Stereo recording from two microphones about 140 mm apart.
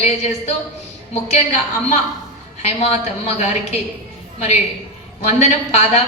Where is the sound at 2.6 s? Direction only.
50° left (ahead or behind).